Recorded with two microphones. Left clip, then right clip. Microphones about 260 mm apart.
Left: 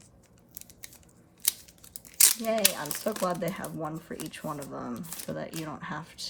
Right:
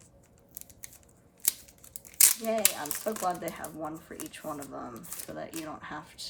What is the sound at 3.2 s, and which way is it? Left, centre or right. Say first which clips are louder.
Speech: left 1 dB; left.